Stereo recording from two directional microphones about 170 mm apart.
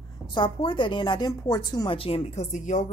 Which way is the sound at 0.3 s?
30° left (ahead or behind).